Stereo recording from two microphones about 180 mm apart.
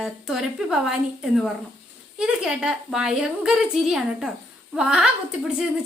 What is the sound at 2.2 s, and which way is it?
Speech, 5° right (ahead or behind).